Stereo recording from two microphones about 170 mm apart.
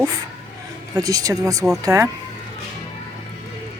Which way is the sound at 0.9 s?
20° right (ahead or behind).